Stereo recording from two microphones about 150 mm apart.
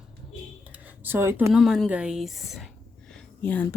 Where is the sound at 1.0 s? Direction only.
15° right (ahead or behind).